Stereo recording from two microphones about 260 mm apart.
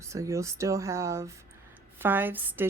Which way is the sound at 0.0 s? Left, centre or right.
Centre.